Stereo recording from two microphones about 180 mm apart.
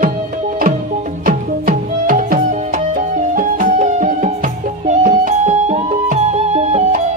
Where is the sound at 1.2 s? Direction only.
50° right (ahead or behind).